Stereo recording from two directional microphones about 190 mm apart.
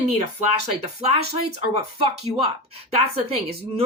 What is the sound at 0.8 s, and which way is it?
Speech, 30° right (ahead or behind).